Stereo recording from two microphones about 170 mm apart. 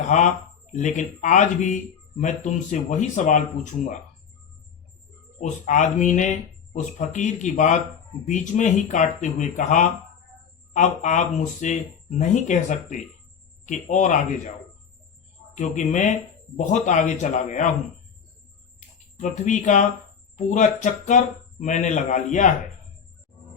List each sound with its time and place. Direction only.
0.0 s speech: 45° left (ahead or behind)
5.4 s speech: 45° left (ahead or behind)
15.5 s speech: 45° left (ahead or behind)
19.1 s speech: 45° left (ahead or behind)